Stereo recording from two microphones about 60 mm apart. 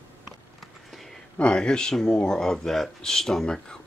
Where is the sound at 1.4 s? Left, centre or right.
Centre.